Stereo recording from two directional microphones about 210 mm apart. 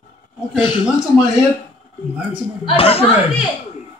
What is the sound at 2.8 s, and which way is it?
Speech, 30° left (ahead or behind).